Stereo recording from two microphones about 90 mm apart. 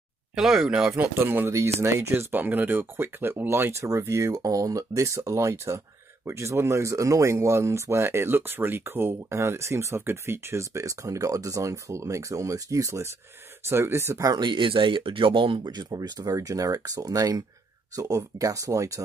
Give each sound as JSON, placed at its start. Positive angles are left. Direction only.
{"t": 0.4, "sound": "speech", "side_deg": -5}
{"t": 0.9, "sound": "speech", "side_deg": -25}
{"t": 14.4, "sound": "speech", "side_deg": -65}
{"t": 15.6, "sound": "speech", "side_deg": -50}